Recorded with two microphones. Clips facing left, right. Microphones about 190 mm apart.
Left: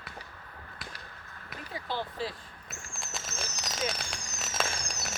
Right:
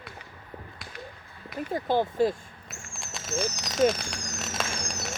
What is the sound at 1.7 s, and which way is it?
Speech, 50° right (ahead or behind).